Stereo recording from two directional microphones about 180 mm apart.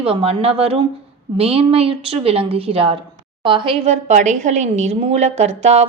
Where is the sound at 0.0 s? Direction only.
35° right (ahead or behind).